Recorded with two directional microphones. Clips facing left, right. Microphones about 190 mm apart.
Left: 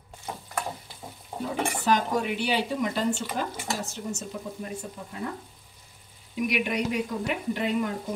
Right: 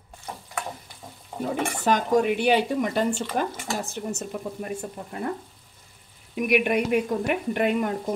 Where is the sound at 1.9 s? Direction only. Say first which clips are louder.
Right 5 dB; 50° right (ahead or behind).